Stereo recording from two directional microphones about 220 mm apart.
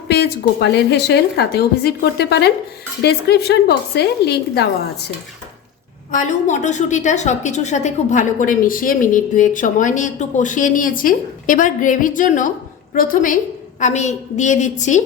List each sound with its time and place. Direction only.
0.1 s a woman's voice: 50° left (ahead or behind)
6.1 s a woman's voice: 35° left (ahead or behind)